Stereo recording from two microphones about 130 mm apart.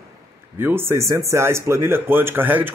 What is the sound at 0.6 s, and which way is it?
A man's voice, 15° right (ahead or behind).